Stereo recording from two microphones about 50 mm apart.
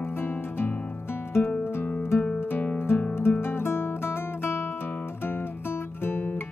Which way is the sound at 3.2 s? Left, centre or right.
Left.